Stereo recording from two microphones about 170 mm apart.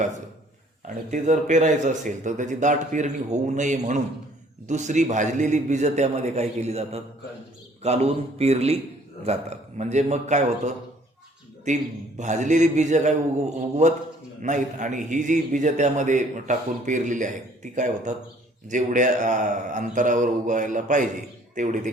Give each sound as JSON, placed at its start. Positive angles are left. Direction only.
{"t": 0.9, "sound": "a man's voice", "side_deg": -45}